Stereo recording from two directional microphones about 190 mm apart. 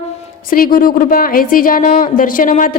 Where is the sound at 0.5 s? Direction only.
50° left (ahead or behind).